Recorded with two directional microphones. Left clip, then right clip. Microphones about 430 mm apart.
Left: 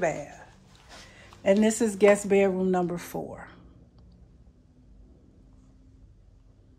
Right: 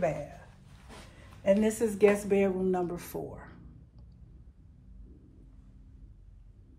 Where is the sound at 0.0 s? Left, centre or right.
Centre.